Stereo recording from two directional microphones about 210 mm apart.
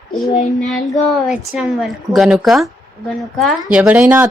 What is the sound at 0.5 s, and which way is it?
A woman's voice, centre (ahead or behind).